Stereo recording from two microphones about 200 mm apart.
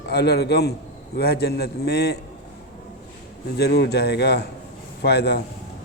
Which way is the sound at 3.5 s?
55° left (ahead or behind).